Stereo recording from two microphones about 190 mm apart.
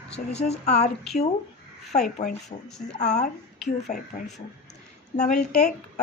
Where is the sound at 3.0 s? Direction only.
40° left (ahead or behind).